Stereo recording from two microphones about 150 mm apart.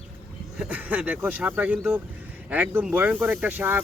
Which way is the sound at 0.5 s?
10° right (ahead or behind).